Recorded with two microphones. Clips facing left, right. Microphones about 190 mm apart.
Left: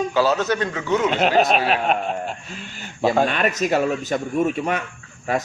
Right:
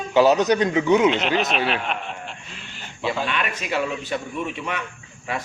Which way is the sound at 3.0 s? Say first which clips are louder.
Left 7 dB; 45° left (ahead or behind).